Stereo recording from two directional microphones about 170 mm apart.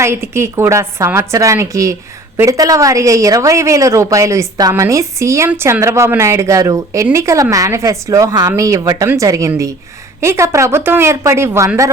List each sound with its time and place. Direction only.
0.0 s a woman's voice: 15° right (ahead or behind)